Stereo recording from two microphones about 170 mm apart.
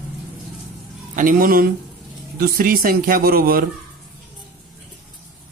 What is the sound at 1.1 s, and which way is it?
Speech, 55° right (ahead or behind).